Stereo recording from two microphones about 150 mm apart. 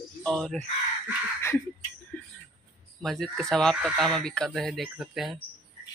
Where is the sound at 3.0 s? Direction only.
Centre (ahead or behind).